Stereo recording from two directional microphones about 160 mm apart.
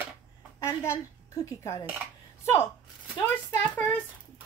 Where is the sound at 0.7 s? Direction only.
20° left (ahead or behind).